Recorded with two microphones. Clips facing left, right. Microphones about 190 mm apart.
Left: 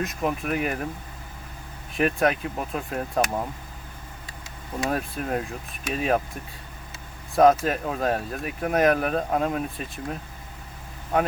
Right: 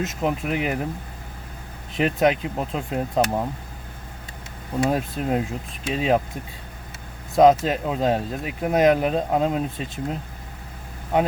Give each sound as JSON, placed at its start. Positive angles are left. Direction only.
{"t": 0.0, "sound": "speech", "side_deg": -25}
{"t": 2.0, "sound": "speech", "side_deg": -20}
{"t": 4.8, "sound": "speech", "side_deg": -20}